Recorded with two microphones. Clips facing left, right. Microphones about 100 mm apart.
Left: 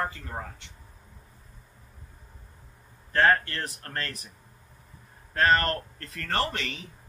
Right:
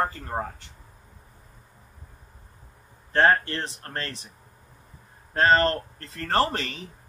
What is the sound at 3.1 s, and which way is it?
Speech, 30° right (ahead or behind).